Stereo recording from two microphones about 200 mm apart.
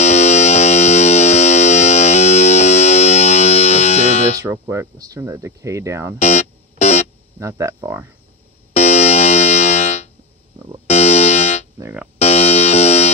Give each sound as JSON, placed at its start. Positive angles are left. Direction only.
{"t": 0.0, "sound": "music", "side_deg": 35}
{"t": 4.4, "sound": "speech", "side_deg": -15}
{"t": 6.2, "sound": "music", "side_deg": 35}
{"t": 7.3, "sound": "speech", "side_deg": -15}
{"t": 8.7, "sound": "music", "side_deg": 35}
{"t": 11.8, "sound": "speech", "side_deg": -5}
{"t": 12.2, "sound": "music", "side_deg": 30}